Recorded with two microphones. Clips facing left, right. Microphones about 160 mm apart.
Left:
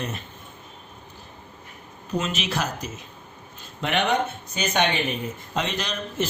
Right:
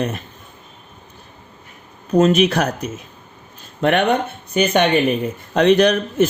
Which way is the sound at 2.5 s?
65° right (ahead or behind).